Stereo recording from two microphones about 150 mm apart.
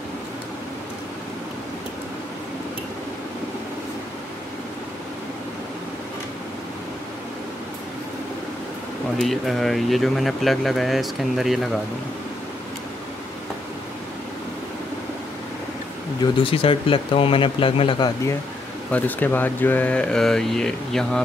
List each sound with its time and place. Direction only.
9.2 s speech: centre (ahead or behind)
16.3 s a man's voice: 35° left (ahead or behind)
18.9 s speech: 10° left (ahead or behind)